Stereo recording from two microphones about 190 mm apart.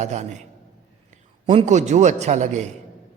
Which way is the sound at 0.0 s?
35° right (ahead or behind).